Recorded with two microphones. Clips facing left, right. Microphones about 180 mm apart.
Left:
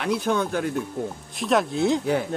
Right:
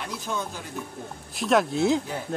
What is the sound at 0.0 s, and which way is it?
Speech, 65° left (ahead or behind).